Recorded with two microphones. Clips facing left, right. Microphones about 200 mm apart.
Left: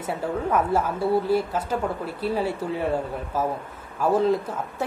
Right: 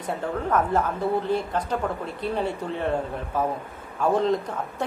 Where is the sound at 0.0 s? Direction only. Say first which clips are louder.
Left 1 dB; 10° left (ahead or behind).